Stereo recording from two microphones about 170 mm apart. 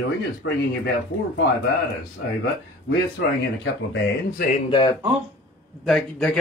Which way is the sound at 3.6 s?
90° left.